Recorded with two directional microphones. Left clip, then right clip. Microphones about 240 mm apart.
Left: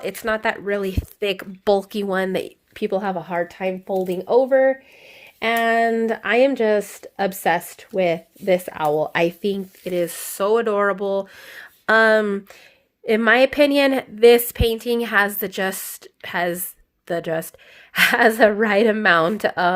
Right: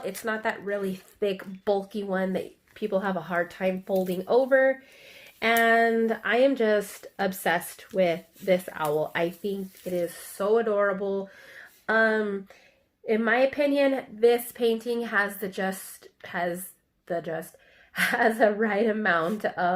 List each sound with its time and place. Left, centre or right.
0.0 s a woman's voice: left